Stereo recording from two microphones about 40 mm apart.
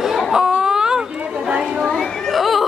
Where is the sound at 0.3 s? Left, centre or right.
Centre.